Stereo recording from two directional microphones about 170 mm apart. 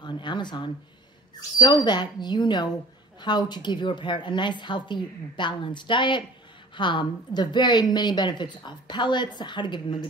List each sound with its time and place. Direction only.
0.0 s speech: 25° left (ahead or behind)
1.9 s a woman's voice: 25° left (ahead or behind)